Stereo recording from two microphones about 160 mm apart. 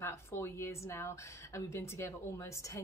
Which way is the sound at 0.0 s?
15° left (ahead or behind).